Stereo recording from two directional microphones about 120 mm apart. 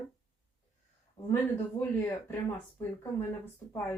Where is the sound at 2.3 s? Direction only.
20° left (ahead or behind).